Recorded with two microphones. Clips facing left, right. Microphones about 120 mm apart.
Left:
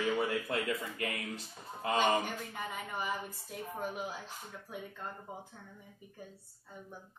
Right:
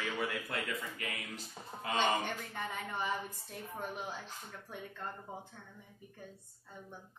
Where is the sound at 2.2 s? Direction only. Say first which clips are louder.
Even; 5° left (ahead or behind).